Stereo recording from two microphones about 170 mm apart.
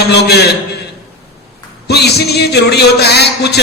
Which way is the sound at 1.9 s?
70° left (ahead or behind).